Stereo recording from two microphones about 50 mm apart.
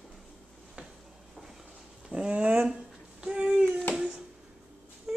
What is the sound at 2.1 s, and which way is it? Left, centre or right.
Speech, right.